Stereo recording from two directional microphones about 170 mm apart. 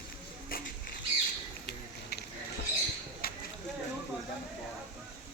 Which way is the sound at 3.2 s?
60° left (ahead or behind).